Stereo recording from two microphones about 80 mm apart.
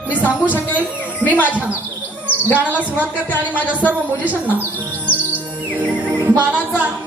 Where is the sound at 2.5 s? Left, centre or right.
Centre.